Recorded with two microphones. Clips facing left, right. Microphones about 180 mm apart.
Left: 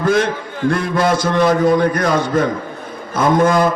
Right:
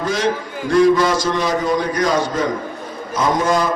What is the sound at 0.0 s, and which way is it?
A man's voice, 55° left (ahead or behind).